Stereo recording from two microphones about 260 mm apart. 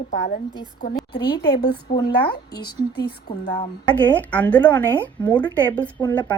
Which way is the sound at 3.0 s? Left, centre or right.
Left.